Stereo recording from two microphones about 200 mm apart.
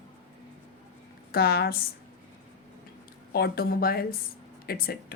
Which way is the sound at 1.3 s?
50° left (ahead or behind).